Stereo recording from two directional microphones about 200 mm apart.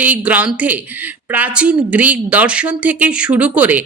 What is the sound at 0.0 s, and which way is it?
A woman's voice, 5° right (ahead or behind).